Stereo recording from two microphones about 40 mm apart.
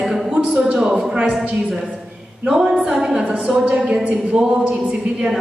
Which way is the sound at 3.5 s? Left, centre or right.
Centre.